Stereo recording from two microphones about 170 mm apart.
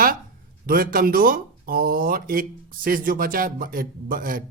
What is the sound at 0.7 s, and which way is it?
Speech, 55° right (ahead or behind).